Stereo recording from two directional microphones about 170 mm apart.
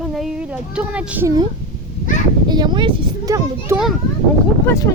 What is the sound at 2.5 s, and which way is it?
A child's voice, 25° right (ahead or behind).